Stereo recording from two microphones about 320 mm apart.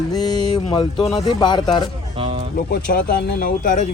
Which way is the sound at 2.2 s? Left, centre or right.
Centre.